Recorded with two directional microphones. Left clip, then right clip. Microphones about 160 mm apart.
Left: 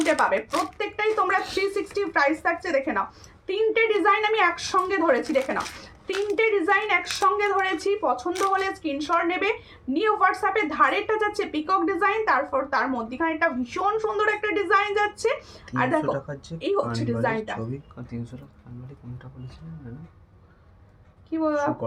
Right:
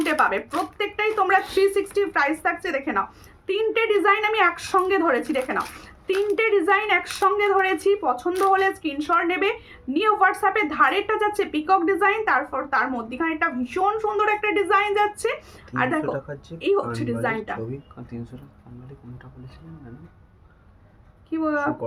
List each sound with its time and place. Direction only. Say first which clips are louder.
0.0 s a woman's voice: right 1 dB; 20° right (ahead or behind)
16.1 s speech: right 1 dB; centre (ahead or behind)
16.6 s a woman's voice: right 3 dB; 20° right (ahead or behind)
21.2 s a woman's voice: even; 20° right (ahead or behind)